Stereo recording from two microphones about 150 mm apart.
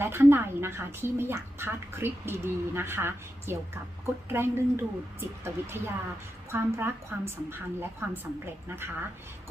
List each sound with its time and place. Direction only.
0.0 s a woman's voice: 15° right (ahead or behind)